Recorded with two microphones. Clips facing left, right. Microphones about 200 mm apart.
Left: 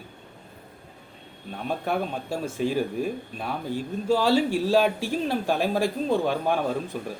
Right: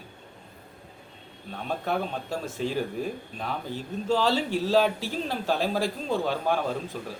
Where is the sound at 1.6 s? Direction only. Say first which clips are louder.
Left 2 dB; 10° left (ahead or behind).